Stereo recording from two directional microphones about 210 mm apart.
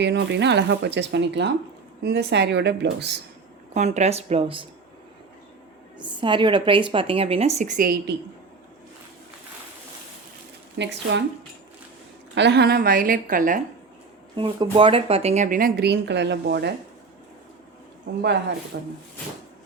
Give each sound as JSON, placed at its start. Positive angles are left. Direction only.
{"t": 0.0, "sound": "a woman's voice", "side_deg": -55}
{"t": 3.8, "sound": "speech", "side_deg": -30}
{"t": 6.0, "sound": "a woman's voice", "side_deg": -20}
{"t": 10.8, "sound": "speech", "side_deg": -55}
{"t": 12.3, "sound": "a woman's voice", "side_deg": -55}
{"t": 14.3, "sound": "speech", "side_deg": -25}
{"t": 18.7, "sound": "a woman's voice", "side_deg": -55}